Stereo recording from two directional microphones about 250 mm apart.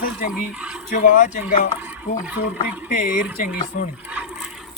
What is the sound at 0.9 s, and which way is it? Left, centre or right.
Speech, left.